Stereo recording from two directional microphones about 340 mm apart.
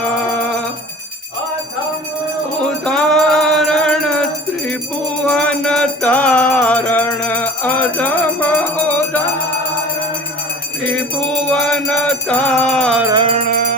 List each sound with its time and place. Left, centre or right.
2.6 s music: centre
10.8 s music: centre
13.1 s music: centre